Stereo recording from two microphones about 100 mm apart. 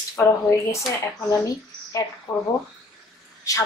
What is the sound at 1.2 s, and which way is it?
Speech, 35° left (ahead or behind).